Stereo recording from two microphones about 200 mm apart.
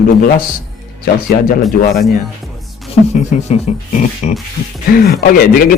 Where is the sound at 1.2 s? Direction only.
45° left (ahead or behind).